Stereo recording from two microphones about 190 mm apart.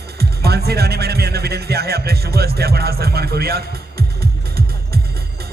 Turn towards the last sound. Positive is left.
turn(degrees=-55)  # may be behind; listen again after turning